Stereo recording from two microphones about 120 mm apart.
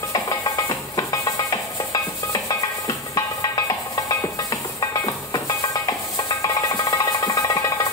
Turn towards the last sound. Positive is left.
turn(degrees=30)  # may be behind; listen again after turning